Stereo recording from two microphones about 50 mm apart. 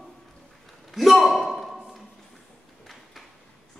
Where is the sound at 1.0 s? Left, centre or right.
Centre.